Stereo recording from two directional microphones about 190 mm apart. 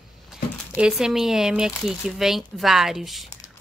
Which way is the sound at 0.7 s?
5° right (ahead or behind).